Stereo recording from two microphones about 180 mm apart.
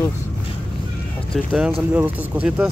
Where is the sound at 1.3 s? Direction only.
5° right (ahead or behind).